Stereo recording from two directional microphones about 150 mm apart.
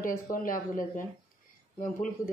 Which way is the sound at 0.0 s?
65° left (ahead or behind).